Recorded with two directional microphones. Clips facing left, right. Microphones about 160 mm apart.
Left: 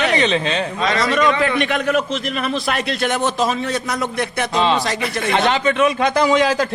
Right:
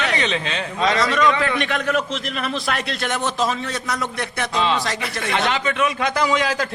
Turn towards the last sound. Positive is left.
turn(degrees=25)  # may be behind; listen again after turning